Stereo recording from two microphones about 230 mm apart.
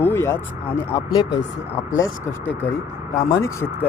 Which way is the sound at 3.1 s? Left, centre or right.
Centre.